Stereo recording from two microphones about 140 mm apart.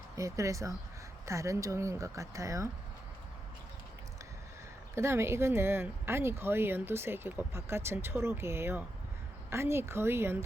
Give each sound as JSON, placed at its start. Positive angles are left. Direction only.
{"t": 0.2, "sound": "speech", "side_deg": -20}
{"t": 4.9, "sound": "speech", "side_deg": -20}